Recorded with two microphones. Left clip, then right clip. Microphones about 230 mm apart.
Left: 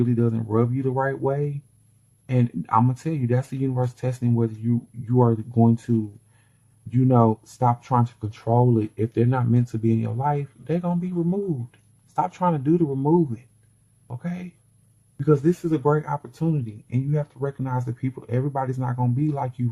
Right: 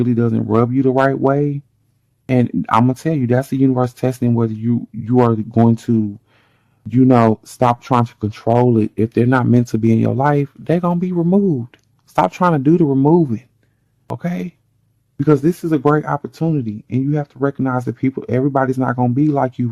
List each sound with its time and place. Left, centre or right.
0.0 s speech: right
6.9 s speech: right
15.2 s speech: right